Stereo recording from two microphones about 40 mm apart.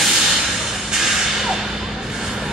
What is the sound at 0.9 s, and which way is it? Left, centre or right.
Whip, centre.